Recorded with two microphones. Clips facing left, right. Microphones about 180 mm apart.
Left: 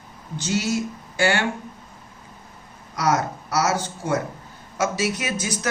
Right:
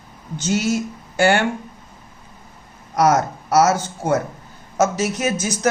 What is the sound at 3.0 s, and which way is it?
Speech, 50° right (ahead or behind).